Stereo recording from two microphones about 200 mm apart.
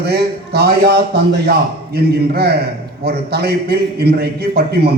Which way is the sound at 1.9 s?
55° right (ahead or behind).